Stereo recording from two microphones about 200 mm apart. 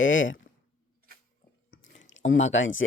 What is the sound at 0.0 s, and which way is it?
Speech, 75° left (ahead or behind).